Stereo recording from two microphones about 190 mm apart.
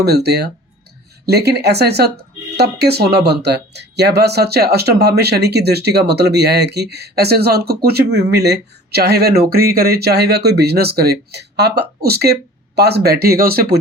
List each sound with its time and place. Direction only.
0.0 s speech: 60° right (ahead or behind)